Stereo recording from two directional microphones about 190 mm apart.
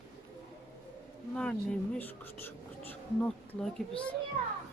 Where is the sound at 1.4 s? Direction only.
5° left (ahead or behind).